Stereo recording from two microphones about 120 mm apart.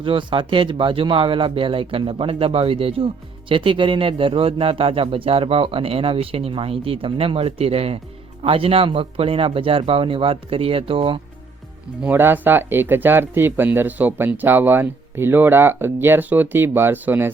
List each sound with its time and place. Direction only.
0.0 s a man's voice: 45° right (ahead or behind)
12.0 s speech: 15° right (ahead or behind)